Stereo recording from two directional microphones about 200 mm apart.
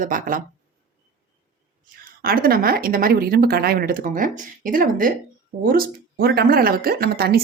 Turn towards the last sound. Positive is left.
turn(degrees=-50)  # may be behind; listen again after turning